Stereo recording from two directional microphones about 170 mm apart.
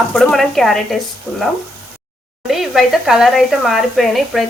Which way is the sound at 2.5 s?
Centre (ahead or behind).